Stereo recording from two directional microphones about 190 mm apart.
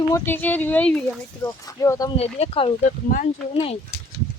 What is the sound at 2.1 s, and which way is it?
Speech, 30° left (ahead or behind).